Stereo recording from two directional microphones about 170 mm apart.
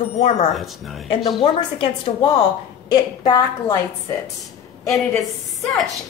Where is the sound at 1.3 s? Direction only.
30° left (ahead or behind).